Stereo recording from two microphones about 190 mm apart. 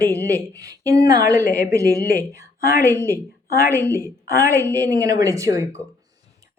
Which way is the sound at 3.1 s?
55° left (ahead or behind).